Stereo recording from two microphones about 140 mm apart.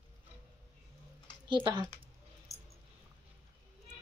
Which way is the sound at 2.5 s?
25° left (ahead or behind).